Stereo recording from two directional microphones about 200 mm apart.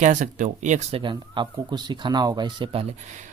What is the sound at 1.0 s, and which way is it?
Speech, 25° right (ahead or behind).